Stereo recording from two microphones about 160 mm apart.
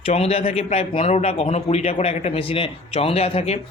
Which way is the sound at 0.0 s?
40° left (ahead or behind).